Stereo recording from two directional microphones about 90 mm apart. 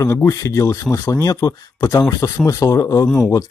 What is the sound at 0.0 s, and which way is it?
Speech, 35° left (ahead or behind).